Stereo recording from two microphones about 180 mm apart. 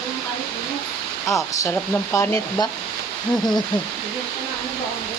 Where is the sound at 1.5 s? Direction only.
15° left (ahead or behind).